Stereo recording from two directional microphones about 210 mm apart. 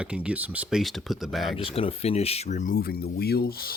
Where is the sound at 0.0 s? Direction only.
5° right (ahead or behind).